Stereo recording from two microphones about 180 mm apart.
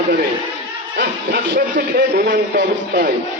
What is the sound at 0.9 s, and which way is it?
A man's voice, 55° right (ahead or behind).